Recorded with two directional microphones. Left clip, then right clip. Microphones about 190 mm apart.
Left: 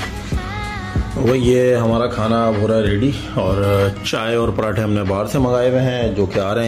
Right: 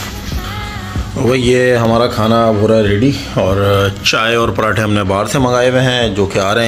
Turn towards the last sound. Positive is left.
turn(degrees=5)  # may be behind; listen again after turning